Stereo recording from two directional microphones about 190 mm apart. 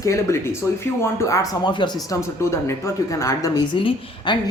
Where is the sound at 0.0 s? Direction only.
15° left (ahead or behind).